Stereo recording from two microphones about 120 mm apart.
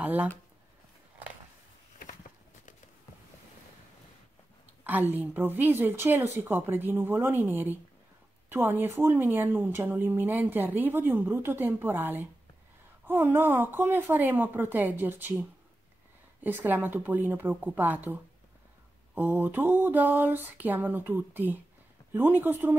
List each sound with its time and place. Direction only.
0.0 s speech: 15° right (ahead or behind)
4.8 s speech: 15° right (ahead or behind)
16.4 s speech: 15° right (ahead or behind)